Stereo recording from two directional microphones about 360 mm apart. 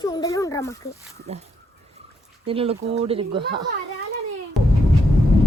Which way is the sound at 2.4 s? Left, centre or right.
Centre.